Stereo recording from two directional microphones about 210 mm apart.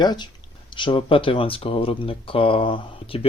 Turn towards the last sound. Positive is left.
turn(degrees=25)  # may be behind; listen again after turning